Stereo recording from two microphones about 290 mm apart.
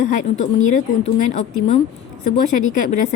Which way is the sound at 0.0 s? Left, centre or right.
Left.